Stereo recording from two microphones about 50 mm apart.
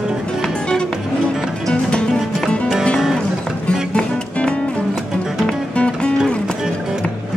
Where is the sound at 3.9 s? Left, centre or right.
Left.